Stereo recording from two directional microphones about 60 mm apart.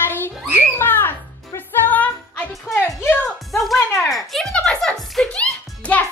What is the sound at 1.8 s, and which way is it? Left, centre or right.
Music, left.